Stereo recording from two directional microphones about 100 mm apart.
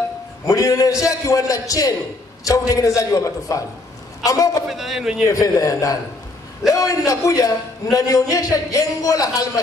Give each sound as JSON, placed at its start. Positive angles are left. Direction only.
{"t": 0.5, "sound": "a man's voice", "side_deg": 35}
{"t": 4.6, "sound": "speech", "side_deg": -5}
{"t": 5.3, "sound": "a man's voice", "side_deg": 35}